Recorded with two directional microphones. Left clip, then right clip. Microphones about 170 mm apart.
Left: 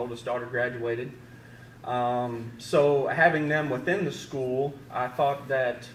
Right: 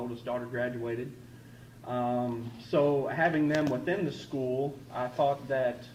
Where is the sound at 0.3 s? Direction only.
30° left (ahead or behind).